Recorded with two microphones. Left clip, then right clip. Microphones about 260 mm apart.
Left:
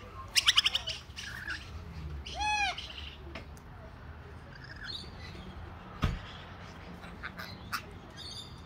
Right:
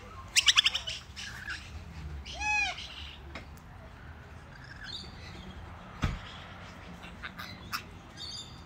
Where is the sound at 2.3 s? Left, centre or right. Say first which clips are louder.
Right 1 dB; right.